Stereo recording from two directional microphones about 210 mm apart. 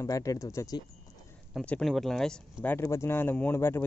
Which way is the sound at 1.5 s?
5° left (ahead or behind).